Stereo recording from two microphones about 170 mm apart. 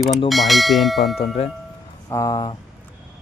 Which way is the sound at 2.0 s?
20° left (ahead or behind).